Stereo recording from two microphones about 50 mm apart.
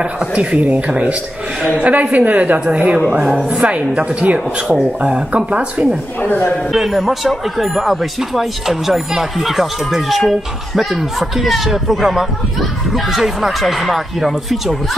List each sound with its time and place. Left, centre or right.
0.0 s speech: right
6.2 s a man's voice: left
6.7 s speech: centre